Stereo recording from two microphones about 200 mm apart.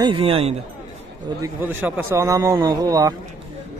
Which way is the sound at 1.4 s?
10° right (ahead or behind).